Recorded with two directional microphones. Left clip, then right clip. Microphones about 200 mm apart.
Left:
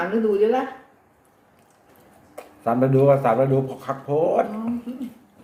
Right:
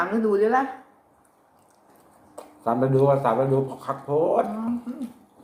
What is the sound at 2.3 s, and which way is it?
Speech, 15° left (ahead or behind).